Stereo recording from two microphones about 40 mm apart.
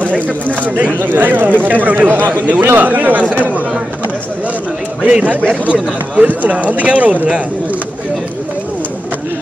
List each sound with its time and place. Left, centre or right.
0.9 s a man's voice: right
5.0 s speech: right